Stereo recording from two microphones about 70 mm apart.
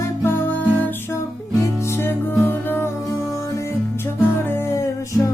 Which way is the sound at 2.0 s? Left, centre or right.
Left.